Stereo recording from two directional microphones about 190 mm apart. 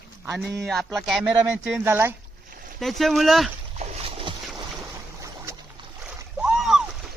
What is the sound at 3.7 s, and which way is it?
Splash, 35° right (ahead or behind).